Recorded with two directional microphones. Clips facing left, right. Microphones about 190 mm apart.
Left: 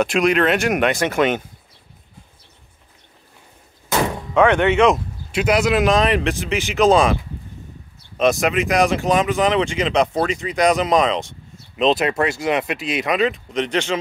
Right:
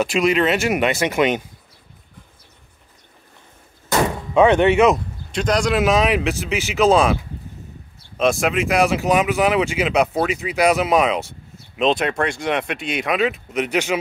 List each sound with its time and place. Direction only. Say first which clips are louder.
0.0 s speech: left 1 dB; centre (ahead or behind)
4.3 s speech: right 2 dB; 15° right (ahead or behind)
4.8 s speech: even; 5° left (ahead or behind)
8.2 s speech: left 1 dB; centre (ahead or behind)